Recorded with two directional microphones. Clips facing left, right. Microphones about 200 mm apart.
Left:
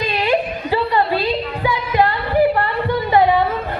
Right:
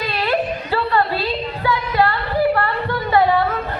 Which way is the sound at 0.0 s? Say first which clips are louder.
Left 2 dB; 15° left (ahead or behind).